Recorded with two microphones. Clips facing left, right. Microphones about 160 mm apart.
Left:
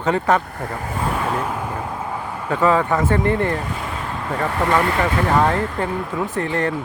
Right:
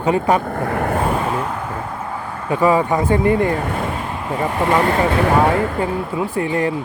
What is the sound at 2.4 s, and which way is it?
Speech, 10° right (ahead or behind).